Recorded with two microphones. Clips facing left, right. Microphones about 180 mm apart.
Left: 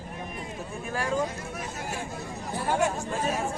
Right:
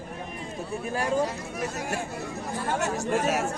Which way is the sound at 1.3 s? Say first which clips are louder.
Right 4 dB; 70° right (ahead or behind).